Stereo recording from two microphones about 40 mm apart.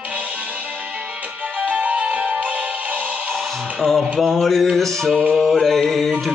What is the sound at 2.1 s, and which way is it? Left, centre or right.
Music, right.